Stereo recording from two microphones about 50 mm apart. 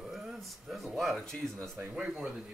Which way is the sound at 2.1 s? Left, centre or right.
Centre.